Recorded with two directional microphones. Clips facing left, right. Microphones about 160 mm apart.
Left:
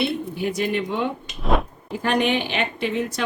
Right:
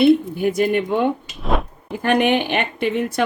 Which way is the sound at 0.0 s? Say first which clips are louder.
Right 9 dB; 50° right (ahead or behind).